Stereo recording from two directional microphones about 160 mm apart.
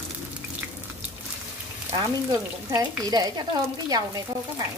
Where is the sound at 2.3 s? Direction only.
25° right (ahead or behind).